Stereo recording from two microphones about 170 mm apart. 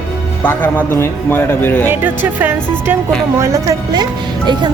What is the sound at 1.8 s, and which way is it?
Speech, 10° right (ahead or behind).